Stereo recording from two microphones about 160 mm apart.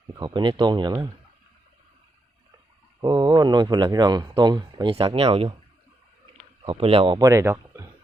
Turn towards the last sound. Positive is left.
turn(degrees=-15)  # may be behind; listen again after turning